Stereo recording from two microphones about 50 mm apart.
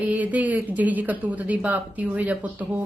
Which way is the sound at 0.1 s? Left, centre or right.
Right.